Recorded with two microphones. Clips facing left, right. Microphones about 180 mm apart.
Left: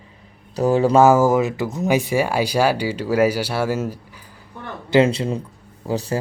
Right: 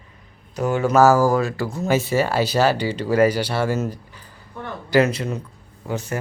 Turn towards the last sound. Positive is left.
turn(degrees=30)  # may be behind; listen again after turning